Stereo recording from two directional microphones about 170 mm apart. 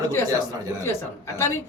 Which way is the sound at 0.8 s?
15° left (ahead or behind).